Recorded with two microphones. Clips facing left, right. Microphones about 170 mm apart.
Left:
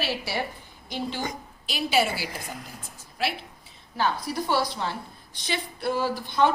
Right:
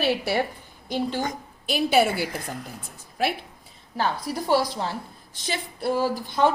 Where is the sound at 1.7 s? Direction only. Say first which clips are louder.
Right 4 dB; 55° right (ahead or behind).